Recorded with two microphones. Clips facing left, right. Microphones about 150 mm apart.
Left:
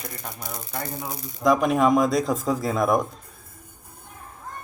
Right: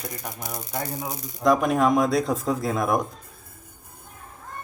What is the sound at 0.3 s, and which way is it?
Speech, 15° right (ahead or behind).